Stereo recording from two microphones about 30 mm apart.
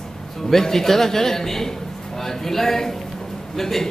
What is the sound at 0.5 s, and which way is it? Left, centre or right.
A man's voice, centre.